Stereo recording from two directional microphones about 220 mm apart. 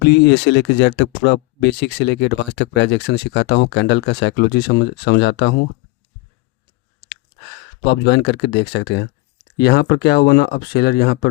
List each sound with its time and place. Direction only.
0.0 s speech: 50° left (ahead or behind)
7.9 s speech: 50° left (ahead or behind)